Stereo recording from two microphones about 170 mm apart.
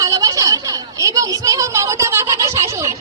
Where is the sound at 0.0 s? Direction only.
20° right (ahead or behind).